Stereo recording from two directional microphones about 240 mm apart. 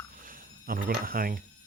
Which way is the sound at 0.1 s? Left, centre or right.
Right.